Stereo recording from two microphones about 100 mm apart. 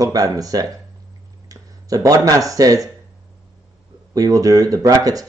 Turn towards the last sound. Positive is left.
turn(degrees=-35)  # may be behind; listen again after turning